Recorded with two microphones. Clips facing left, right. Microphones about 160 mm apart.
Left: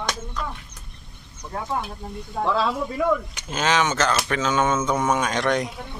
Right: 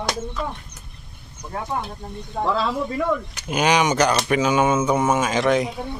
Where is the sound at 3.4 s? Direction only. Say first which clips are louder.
Right 5 dB; 15° right (ahead or behind).